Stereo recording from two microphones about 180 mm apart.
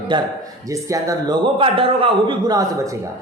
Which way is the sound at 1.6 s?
30° right (ahead or behind).